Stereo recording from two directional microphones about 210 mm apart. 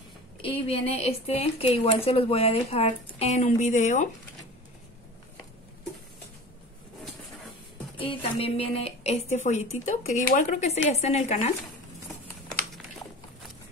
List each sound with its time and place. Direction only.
0.4 s speech: 30° left (ahead or behind)
8.1 s a woman's voice: 30° left (ahead or behind)